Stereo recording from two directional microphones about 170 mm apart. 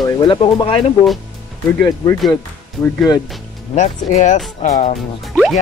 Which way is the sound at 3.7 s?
45° left (ahead or behind).